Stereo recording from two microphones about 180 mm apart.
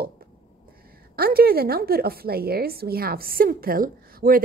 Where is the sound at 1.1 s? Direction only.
55° right (ahead or behind).